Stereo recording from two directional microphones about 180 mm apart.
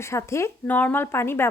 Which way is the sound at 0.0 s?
15° left (ahead or behind).